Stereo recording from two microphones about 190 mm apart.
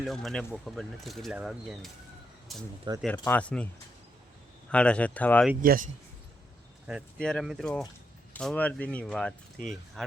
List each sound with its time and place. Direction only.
0.0 s speech: centre (ahead or behind)
4.7 s speech: 5° left (ahead or behind)
5.6 s speech: 45° right (ahead or behind)
7.2 s speech: 5° left (ahead or behind)